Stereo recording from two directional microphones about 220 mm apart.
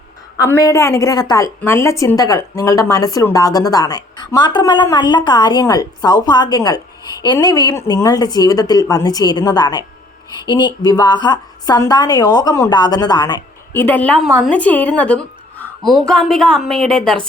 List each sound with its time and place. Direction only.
0.3 s a woman's voice: 15° left (ahead or behind)